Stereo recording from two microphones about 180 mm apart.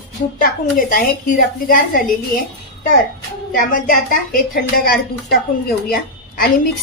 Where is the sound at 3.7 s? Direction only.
50° left (ahead or behind).